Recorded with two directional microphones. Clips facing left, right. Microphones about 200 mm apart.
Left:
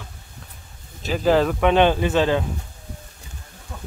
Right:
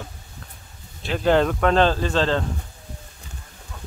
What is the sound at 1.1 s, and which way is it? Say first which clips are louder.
Speech: left 1 dB; centre (ahead or behind).